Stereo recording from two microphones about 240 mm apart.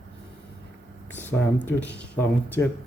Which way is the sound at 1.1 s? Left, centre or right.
Centre.